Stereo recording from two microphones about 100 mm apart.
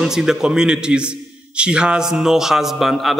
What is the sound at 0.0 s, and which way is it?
A man's voice, 5° right (ahead or behind).